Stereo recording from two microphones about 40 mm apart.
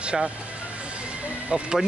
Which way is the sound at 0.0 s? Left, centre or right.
Right.